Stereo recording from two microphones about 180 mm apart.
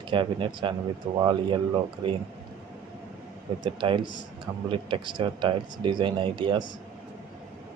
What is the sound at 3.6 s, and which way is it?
Speech, 25° right (ahead or behind).